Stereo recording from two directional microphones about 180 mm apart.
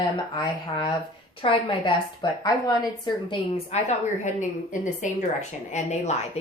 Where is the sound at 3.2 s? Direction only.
40° left (ahead or behind).